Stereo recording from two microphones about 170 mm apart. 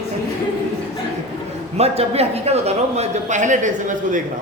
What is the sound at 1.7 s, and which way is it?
A man's voice, 35° right (ahead or behind).